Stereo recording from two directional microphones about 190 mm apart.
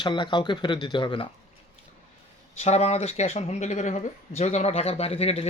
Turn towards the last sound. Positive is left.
turn(degrees=35)  # may be behind; listen again after turning